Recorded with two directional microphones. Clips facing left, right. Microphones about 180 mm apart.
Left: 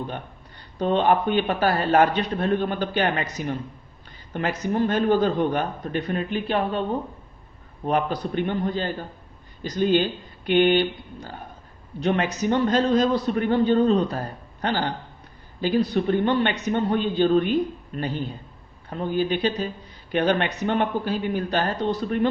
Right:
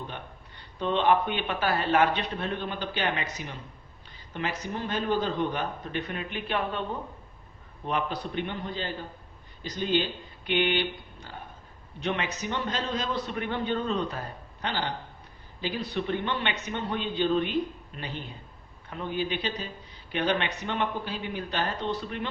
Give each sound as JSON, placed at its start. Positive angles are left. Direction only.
{"t": 0.8, "sound": "speech", "side_deg": 40}
{"t": 7.9, "sound": "a man's voice", "side_deg": 45}